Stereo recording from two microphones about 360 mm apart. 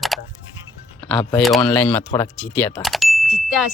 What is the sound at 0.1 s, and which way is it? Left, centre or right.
Music, centre.